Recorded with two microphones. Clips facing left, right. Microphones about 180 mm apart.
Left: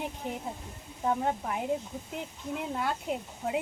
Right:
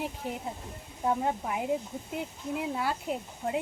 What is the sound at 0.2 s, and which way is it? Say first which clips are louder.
Speech: even; 5° right (ahead or behind).